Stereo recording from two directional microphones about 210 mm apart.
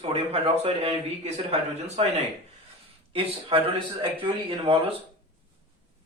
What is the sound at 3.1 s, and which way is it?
A man's voice, 25° right (ahead or behind).